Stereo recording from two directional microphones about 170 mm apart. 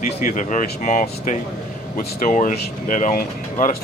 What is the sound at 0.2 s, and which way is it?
Speech, 50° left (ahead or behind).